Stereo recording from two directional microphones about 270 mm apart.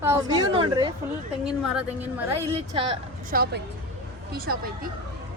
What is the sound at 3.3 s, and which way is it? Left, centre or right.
Speech, right.